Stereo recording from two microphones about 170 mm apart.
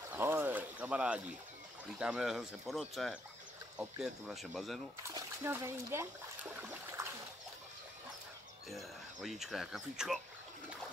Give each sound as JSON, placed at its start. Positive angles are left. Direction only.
{"t": 0.1, "sound": "a sound", "side_deg": -10}
{"t": 1.9, "sound": "speech", "side_deg": -5}
{"t": 5.0, "sound": "speech", "side_deg": -15}
{"t": 7.0, "sound": "splash", "side_deg": -15}
{"t": 8.6, "sound": "speech", "side_deg": 0}